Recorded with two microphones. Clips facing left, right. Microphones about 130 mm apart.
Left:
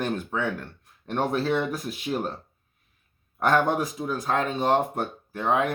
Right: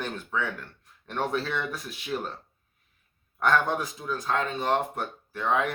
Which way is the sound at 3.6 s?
25° left (ahead or behind).